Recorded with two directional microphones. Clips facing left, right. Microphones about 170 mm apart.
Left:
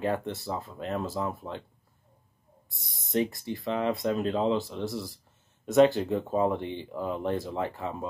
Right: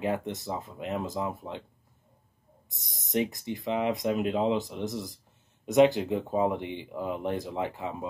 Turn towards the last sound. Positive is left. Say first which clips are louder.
# even
turn(degrees=-15)  # may be behind; listen again after turning